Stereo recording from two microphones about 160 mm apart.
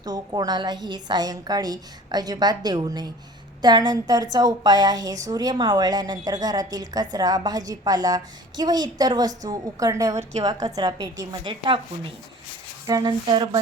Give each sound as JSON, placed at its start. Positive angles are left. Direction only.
{"t": 0.0, "sound": "a woman's voice", "side_deg": -25}
{"t": 12.8, "sound": "a woman's voice", "side_deg": -25}